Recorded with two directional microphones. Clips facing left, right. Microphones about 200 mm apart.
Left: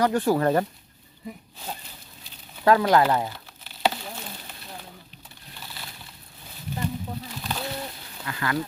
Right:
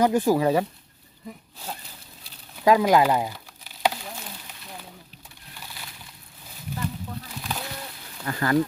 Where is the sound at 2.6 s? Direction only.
15° right (ahead or behind).